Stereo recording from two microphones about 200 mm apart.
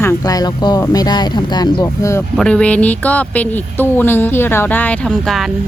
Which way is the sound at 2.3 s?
5° left (ahead or behind).